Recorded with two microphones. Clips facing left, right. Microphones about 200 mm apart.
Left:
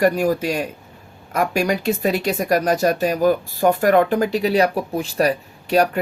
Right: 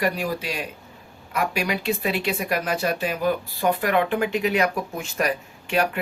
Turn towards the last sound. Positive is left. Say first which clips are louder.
# left 6 dB
turn(degrees=40)  # may be behind; listen again after turning